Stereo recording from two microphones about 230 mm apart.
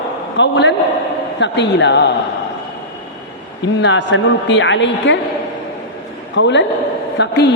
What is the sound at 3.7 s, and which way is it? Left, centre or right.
A woman's voice, left.